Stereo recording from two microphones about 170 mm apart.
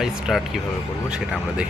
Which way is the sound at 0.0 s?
Centre (ahead or behind).